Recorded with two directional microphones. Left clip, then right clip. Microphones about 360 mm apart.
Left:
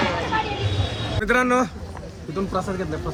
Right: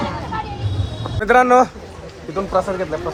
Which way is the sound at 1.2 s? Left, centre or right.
Centre.